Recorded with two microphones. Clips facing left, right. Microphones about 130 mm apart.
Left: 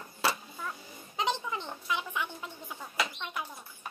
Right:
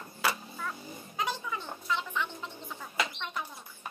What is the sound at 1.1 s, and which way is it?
Music, 20° left (ahead or behind).